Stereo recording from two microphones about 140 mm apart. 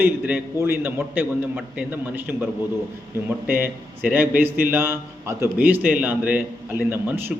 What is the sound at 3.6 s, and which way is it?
A man's voice, 15° right (ahead or behind).